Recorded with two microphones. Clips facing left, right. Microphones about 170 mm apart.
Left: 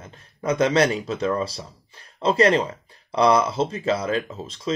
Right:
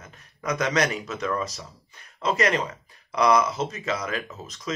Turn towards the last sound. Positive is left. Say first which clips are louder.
# left 5 dB
turn(degrees=30)  # may be behind; listen again after turning